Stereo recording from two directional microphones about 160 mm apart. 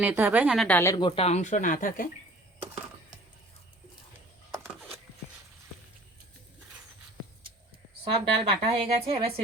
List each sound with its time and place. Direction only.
0.0 s a woman's voice: 10° right (ahead or behind)
0.5 s a woman's voice: centre (ahead or behind)
0.8 s speech: 25° left (ahead or behind); by 2.0 s 60° left (ahead or behind)
4.6 s a sound: 5° right (ahead or behind)
8.1 s a woman's voice: 35° right (ahead or behind)